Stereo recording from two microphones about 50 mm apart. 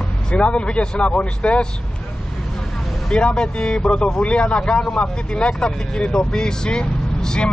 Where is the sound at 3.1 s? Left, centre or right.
Centre.